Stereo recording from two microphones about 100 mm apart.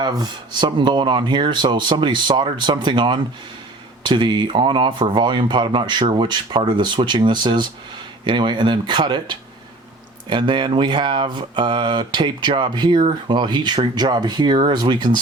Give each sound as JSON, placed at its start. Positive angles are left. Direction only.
{"t": 0.0, "sound": "speech", "side_deg": -50}